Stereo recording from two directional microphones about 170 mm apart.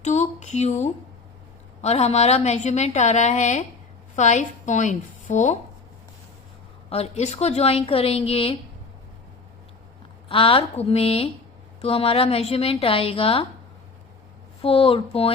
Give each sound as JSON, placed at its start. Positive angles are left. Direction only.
{"t": 0.0, "sound": "a woman's voice", "side_deg": 40}
{"t": 6.9, "sound": "a woman's voice", "side_deg": 40}
{"t": 10.2, "sound": "a woman's voice", "side_deg": 30}
{"t": 14.6, "sound": "a woman's voice", "side_deg": 35}